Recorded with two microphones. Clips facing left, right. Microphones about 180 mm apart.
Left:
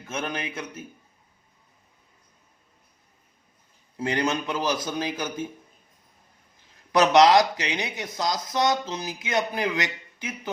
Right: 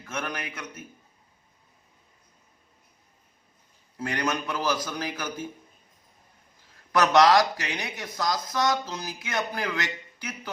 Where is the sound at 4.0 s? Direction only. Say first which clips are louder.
Left 3 dB; 25° left (ahead or behind).